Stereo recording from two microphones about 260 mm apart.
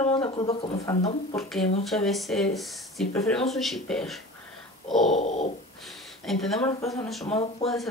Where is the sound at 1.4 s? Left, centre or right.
Centre.